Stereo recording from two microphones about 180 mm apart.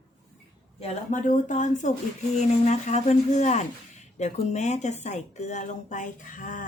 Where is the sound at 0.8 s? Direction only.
40° left (ahead or behind).